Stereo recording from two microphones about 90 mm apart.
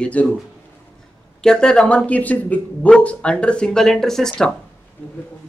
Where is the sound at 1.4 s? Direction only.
10° left (ahead or behind).